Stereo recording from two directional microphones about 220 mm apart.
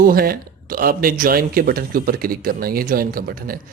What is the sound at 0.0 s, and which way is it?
Speech, 40° right (ahead or behind).